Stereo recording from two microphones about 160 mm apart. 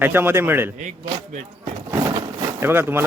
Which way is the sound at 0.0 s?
15° right (ahead or behind).